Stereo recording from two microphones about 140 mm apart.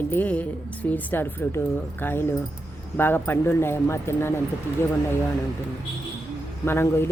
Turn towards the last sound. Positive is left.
turn(degrees=15)  # may be behind; listen again after turning